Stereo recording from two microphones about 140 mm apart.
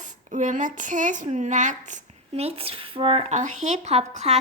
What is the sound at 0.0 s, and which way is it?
A woman's voice, 60° right (ahead or behind).